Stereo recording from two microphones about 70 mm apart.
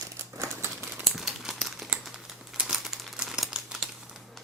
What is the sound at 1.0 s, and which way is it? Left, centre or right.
Crumpling, centre.